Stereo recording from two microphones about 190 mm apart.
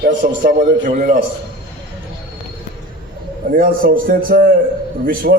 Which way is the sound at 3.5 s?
50° right (ahead or behind).